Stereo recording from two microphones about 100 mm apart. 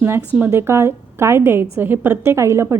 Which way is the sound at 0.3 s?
20° right (ahead or behind).